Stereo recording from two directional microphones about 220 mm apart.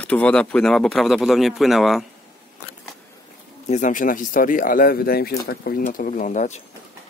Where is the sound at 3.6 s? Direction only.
35° left (ahead or behind).